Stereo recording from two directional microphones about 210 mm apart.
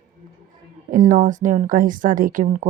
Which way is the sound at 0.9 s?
40° right (ahead or behind).